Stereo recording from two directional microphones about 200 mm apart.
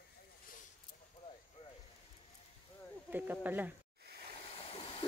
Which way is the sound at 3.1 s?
10° right (ahead or behind).